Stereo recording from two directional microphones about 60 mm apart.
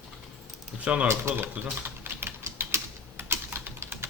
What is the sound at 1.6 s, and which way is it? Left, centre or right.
Typing, right.